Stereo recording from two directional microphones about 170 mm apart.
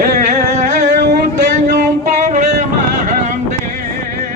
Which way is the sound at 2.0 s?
45° right (ahead or behind).